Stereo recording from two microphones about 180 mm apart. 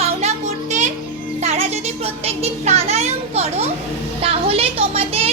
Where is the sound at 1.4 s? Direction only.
35° right (ahead or behind).